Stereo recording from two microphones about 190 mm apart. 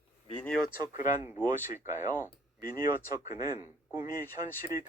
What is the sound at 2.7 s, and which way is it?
Speech, 20° right (ahead or behind).